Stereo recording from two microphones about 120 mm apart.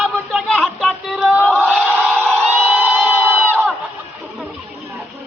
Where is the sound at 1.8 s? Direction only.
15° right (ahead or behind).